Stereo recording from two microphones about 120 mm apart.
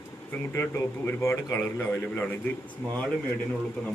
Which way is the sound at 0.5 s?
15° left (ahead or behind).